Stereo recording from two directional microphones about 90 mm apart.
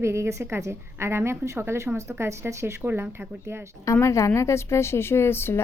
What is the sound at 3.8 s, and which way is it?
Speech, 35° left (ahead or behind).